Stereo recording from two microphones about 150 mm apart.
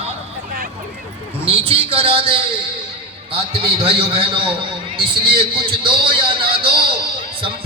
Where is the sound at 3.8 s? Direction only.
40° right (ahead or behind).